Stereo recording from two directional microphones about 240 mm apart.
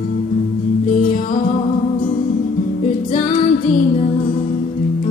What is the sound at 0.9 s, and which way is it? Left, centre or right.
Music, left.